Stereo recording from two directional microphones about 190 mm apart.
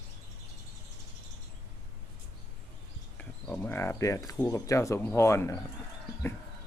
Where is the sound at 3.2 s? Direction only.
5° left (ahead or behind).